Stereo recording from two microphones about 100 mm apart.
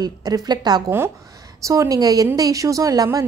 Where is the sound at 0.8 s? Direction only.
25° right (ahead or behind).